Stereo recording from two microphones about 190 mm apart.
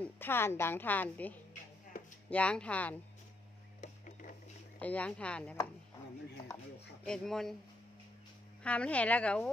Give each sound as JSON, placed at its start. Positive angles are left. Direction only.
{"t": 0.0, "sound": "a woman's voice", "side_deg": 10}
{"t": 3.8, "sound": "a sound", "side_deg": 40}
{"t": 4.7, "sound": "a woman's voice", "side_deg": 5}
{"t": 7.1, "sound": "speech", "side_deg": 0}
{"t": 8.6, "sound": "a woman's voice", "side_deg": 5}